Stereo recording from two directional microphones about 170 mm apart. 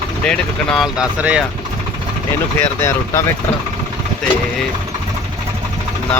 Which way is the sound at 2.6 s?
15° left (ahead or behind).